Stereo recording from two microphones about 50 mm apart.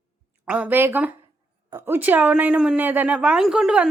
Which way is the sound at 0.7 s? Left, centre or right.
Right.